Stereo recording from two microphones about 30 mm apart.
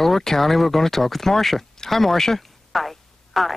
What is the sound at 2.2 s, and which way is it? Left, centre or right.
Telephone, centre.